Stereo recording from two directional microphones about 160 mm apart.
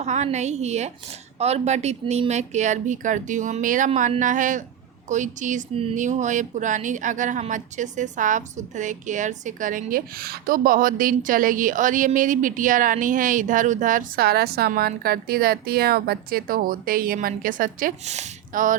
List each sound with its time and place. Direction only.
0.0 s speech: 45° right (ahead or behind); by 14.7 s 80° right
14.7 s speech: 70° right (ahead or behind); by 18.8 s 55° right (ahead or behind)